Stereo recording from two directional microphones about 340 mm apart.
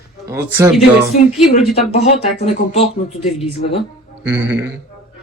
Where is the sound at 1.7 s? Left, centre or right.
Centre.